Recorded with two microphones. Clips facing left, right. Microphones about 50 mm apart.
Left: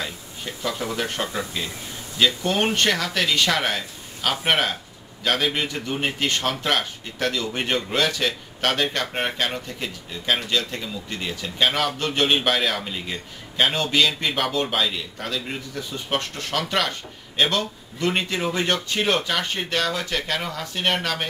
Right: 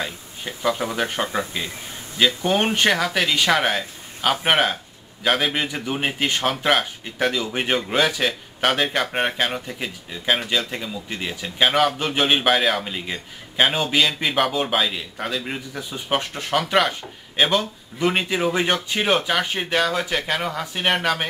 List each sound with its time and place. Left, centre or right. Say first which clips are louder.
0.0 s a man's voice: right 2 dB; centre